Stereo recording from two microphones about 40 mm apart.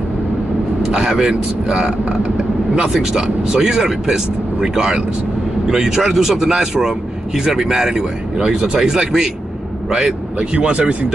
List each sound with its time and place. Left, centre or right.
0.8 s a man's voice: centre
10.5 s speech: right